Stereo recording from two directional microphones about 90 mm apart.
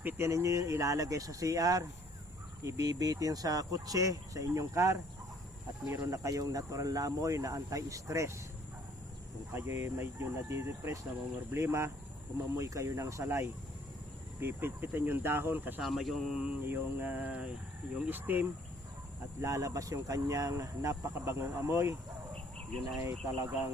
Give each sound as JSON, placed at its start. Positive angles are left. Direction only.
{"t": 0.0, "sound": "speech", "side_deg": -30}
{"t": 9.5, "sound": "speech", "side_deg": -30}
{"t": 15.8, "sound": "speech", "side_deg": 0}
{"t": 16.5, "sound": "a sound", "side_deg": -20}
{"t": 18.0, "sound": "speech", "side_deg": -20}
{"t": 19.4, "sound": "speech", "side_deg": -40}
{"t": 23.0, "sound": "speech", "side_deg": -30}